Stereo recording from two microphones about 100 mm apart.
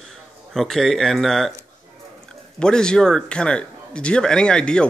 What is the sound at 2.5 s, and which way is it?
Speech, 10° left (ahead or behind).